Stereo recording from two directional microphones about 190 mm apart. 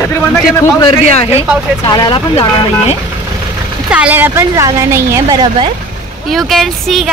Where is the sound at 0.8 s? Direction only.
30° left (ahead or behind).